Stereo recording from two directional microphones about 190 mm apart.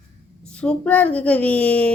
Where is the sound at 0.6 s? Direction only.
10° left (ahead or behind).